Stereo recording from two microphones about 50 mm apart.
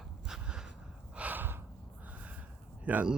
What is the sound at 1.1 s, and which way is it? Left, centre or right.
Gasp, right.